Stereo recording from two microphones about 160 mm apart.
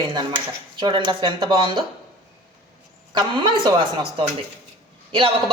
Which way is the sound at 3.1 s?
30° right (ahead or behind).